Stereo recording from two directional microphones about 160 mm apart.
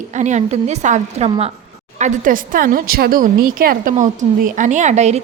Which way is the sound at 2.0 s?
55° right (ahead or behind).